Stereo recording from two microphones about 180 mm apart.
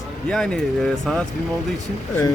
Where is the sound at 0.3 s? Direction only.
5° left (ahead or behind).